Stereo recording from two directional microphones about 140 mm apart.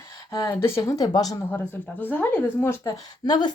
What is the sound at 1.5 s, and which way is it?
Speech, 15° left (ahead or behind).